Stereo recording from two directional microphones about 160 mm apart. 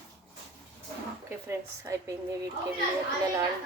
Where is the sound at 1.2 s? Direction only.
20° right (ahead or behind).